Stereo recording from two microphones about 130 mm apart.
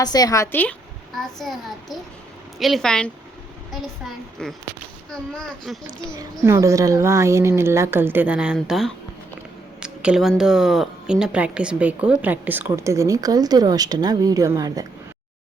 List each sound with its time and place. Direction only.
0.0 s a woman's voice: 30° left (ahead or behind)
0.5 s speech: 15° left (ahead or behind)
1.1 s a child's voice: centre (ahead or behind)
5.3 s a child's voice: centre (ahead or behind)
6.0 s a child's voice: 25° right (ahead or behind)